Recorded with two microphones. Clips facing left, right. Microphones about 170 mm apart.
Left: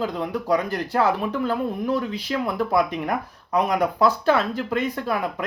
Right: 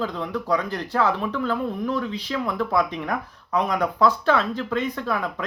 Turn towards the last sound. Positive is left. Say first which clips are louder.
# left 1 dB
turn(degrees=10)  # may be behind; listen again after turning